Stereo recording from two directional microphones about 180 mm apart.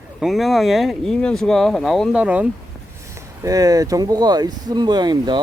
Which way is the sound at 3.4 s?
20° right (ahead or behind).